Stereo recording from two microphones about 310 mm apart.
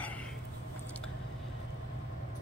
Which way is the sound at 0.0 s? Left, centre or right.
Centre.